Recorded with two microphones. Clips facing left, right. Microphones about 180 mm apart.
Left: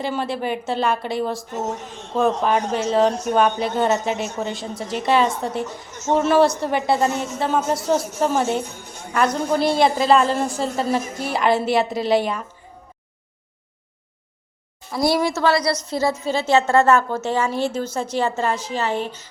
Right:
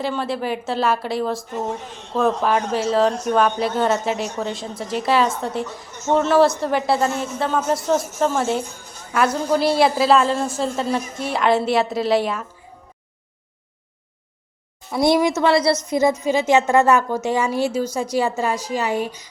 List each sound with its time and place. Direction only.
0.0 s a woman's voice: centre (ahead or behind)
8.6 s a woman's voice: 65° left (ahead or behind)
9.1 s a woman's voice: 5° right (ahead or behind)
15.0 s a woman's voice: 20° right (ahead or behind)